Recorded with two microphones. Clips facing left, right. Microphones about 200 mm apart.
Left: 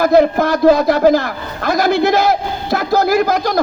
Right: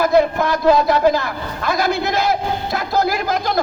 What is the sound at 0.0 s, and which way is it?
A man's voice, 45° left (ahead or behind).